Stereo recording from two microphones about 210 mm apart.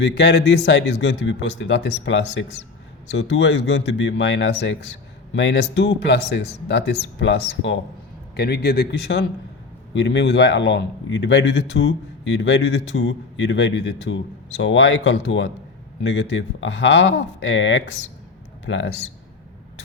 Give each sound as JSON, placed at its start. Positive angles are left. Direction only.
{"t": 0.0, "sound": "a man's voice", "side_deg": 50}
{"t": 8.4, "sound": "a man's voice", "side_deg": 50}